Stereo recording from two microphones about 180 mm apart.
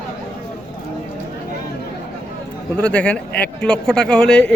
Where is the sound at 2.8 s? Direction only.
5° left (ahead or behind).